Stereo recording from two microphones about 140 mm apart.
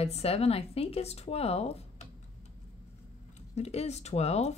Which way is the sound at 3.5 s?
50° left (ahead or behind).